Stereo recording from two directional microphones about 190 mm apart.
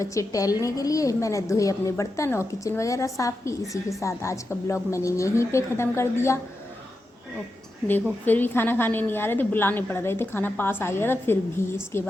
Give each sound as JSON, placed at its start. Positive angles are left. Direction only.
{"t": 0.0, "sound": "a woman's voice", "side_deg": 15}
{"t": 8.2, "sound": "a woman's voice", "side_deg": 10}